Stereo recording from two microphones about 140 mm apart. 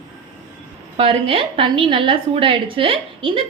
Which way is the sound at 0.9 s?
45° right (ahead or behind).